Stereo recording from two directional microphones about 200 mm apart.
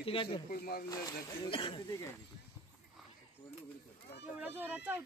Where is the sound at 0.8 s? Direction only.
15° left (ahead or behind).